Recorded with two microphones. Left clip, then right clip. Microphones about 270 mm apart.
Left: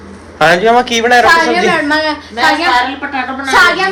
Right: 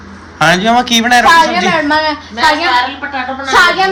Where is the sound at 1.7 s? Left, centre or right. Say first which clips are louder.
Even; right.